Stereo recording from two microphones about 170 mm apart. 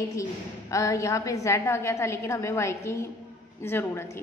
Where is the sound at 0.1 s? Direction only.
20° left (ahead or behind).